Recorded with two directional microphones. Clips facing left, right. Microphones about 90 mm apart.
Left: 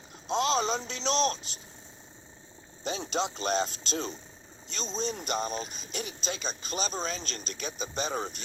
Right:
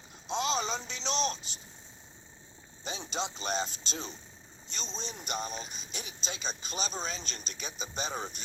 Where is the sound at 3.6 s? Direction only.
55° left (ahead or behind).